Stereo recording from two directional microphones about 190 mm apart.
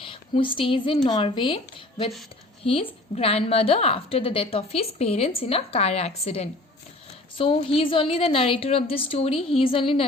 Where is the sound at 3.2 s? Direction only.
30° left (ahead or behind).